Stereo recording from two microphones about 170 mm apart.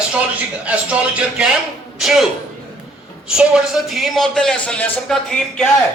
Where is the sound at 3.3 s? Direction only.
5° right (ahead or behind).